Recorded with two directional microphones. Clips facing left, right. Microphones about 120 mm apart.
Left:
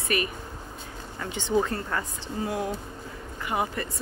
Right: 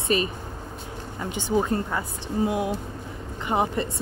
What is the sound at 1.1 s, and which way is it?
Speech, 15° right (ahead or behind).